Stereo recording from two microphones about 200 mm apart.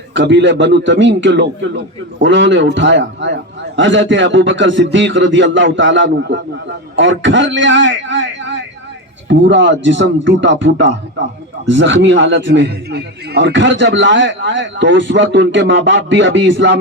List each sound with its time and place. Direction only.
0.1 s a man's voice: 65° right (ahead or behind)